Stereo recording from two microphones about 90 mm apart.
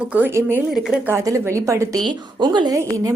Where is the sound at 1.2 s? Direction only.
35° right (ahead or behind).